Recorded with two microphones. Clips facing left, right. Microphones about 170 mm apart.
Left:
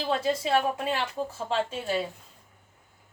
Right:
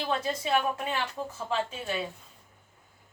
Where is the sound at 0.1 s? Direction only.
35° left (ahead or behind).